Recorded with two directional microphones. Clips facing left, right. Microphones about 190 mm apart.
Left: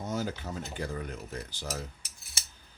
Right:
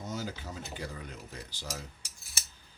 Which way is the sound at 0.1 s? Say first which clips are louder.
Left 5 dB; 50° left (ahead or behind).